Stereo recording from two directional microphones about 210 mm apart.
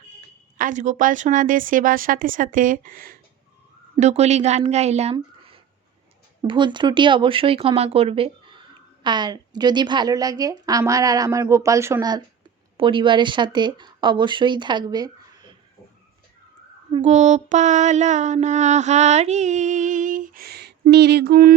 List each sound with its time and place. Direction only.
0.6 s mantra: 35° right (ahead or behind)
3.9 s mantra: 30° right (ahead or behind)
5.1 s a sound: 25° right (ahead or behind)
6.4 s a woman's voice: 20° right (ahead or behind)
16.9 s mantra: 35° right (ahead or behind)